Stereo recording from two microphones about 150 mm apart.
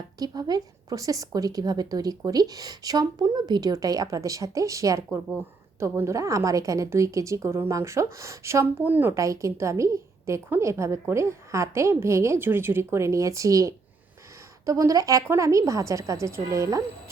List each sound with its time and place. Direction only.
0.2 s a woman's voice: 25° right (ahead or behind)